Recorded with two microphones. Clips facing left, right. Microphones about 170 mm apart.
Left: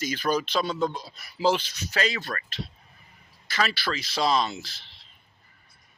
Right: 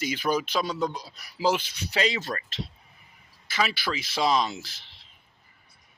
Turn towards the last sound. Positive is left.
turn(degrees=-5)  # may be behind; listen again after turning